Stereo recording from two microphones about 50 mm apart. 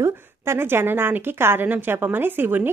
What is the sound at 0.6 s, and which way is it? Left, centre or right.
A woman's voice, right.